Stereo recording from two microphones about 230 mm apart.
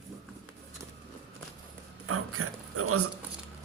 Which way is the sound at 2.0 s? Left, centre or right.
Right.